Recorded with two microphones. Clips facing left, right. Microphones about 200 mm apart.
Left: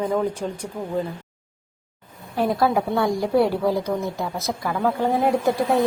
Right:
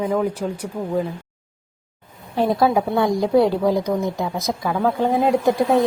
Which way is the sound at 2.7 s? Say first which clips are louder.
Right 2 dB; 20° right (ahead or behind).